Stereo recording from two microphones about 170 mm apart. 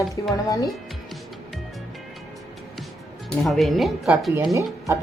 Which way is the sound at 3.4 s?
Centre (ahead or behind).